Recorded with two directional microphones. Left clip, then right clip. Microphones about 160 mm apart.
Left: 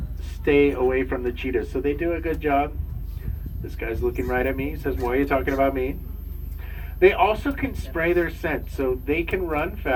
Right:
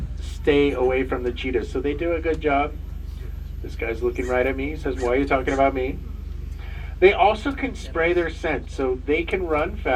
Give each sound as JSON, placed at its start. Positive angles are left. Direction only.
{"t": 0.4, "sound": "speech", "side_deg": 35}
{"t": 4.3, "sound": "a man's voice", "side_deg": 35}
{"t": 7.0, "sound": "a man's voice", "side_deg": 35}